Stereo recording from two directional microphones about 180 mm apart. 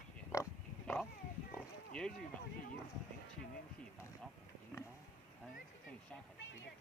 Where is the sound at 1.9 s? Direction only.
5° left (ahead or behind).